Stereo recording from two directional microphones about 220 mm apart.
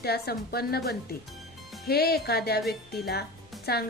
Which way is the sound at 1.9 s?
45° left (ahead or behind).